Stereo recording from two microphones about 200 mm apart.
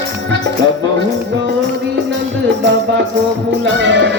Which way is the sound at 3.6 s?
65° right (ahead or behind).